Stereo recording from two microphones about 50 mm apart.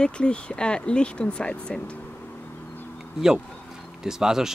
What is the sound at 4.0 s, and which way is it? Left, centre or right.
Speech, centre.